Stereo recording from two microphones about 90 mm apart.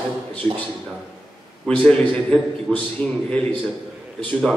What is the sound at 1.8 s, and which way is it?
A man's voice, 10° left (ahead or behind).